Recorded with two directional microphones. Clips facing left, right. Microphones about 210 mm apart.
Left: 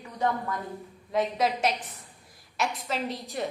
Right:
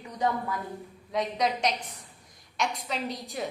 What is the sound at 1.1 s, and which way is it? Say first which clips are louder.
A woman's voice: left 2 dB; 5° left (ahead or behind).